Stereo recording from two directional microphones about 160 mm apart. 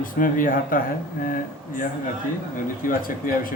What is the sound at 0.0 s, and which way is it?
Speech, 60° left (ahead or behind).